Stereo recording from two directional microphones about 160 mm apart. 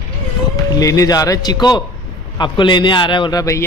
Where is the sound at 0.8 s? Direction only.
20° left (ahead or behind).